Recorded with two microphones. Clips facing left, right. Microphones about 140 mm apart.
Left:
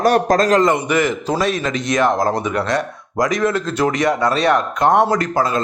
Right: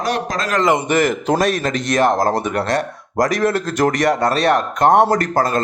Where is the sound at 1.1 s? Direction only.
55° right (ahead or behind).